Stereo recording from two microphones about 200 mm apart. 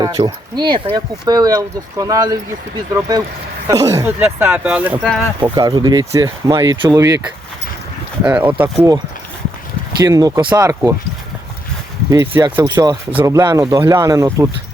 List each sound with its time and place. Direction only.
0.0 s speech: 20° right (ahead or behind)
5.4 s speech: 20° right (ahead or behind)
8.2 s speech: 5° right (ahead or behind)
10.0 s speech: 20° right (ahead or behind)
12.1 s speech: 15° right (ahead or behind)
12.6 s speech: 20° right (ahead or behind)